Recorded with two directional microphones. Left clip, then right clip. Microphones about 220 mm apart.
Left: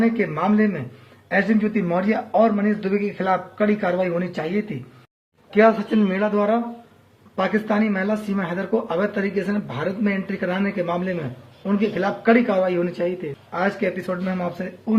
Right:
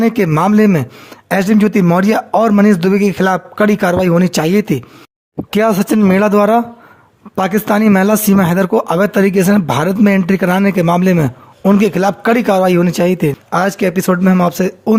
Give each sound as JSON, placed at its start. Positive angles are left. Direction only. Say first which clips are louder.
{"t": 0.0, "sound": "a man's voice", "louder": "right 8 dB", "side_deg": -50}